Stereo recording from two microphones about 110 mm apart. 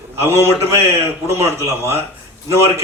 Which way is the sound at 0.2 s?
20° right (ahead or behind).